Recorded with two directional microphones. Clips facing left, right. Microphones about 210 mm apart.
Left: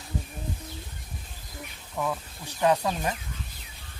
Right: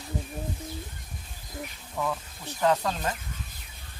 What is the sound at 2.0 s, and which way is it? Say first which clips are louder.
Speech: left 1 dB; 10° left (ahead or behind).